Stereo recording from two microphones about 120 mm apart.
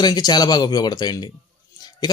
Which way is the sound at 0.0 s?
35° left (ahead or behind).